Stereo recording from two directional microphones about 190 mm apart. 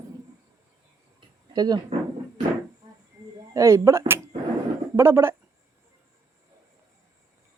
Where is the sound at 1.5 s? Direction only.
20° right (ahead or behind).